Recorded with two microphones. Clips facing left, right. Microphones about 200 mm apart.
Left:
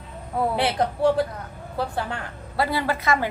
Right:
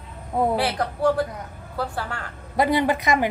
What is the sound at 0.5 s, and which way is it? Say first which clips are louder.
A woman's voice: left 1 dB; 20° left (ahead or behind).